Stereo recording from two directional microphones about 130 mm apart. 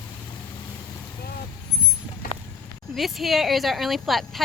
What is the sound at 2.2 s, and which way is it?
Clip-clop, 90° left.